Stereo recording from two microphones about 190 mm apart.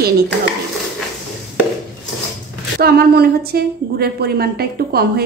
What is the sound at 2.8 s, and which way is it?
A woman's voice, 55° right (ahead or behind).